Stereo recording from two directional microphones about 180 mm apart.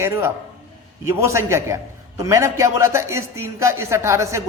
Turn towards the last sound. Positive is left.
turn(degrees=-15)  # may be behind; listen again after turning